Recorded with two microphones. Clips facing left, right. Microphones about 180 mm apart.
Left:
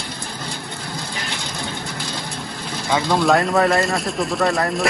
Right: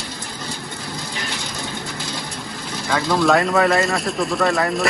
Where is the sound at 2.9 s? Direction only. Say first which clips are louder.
Left 1 dB; 20° left (ahead or behind).